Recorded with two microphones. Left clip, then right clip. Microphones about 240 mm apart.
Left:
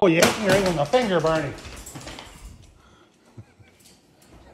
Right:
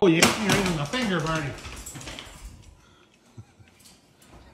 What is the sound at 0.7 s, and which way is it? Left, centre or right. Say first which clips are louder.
Speech: left 7 dB; centre.